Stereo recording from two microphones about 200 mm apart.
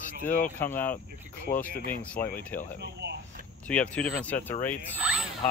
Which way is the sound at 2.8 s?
55° right (ahead or behind).